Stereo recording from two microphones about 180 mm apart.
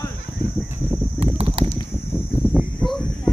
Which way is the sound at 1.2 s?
35° right (ahead or behind).